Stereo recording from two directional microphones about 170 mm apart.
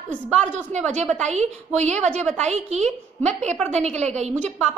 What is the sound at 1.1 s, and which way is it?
A woman's voice, 40° right (ahead or behind).